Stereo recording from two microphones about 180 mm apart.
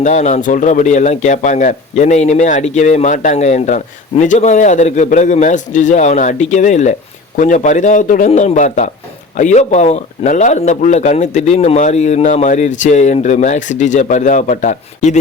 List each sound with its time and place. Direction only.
0.0 s a man's voice: 40° left (ahead or behind)